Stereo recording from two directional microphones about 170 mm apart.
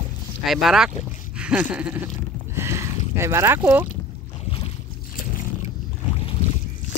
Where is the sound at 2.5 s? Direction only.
15° right (ahead or behind).